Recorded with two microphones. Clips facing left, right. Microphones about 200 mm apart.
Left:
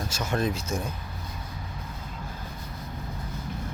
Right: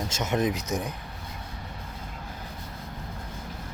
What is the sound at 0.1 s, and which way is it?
Speech, 20° right (ahead or behind).